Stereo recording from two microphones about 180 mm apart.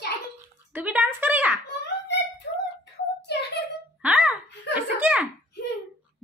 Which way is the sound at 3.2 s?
70° left (ahead or behind).